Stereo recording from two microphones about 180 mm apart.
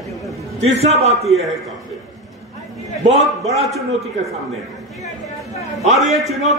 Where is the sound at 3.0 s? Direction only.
35° right (ahead or behind).